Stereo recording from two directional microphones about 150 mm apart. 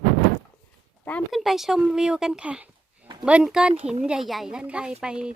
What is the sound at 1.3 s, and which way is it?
Speech, centre (ahead or behind).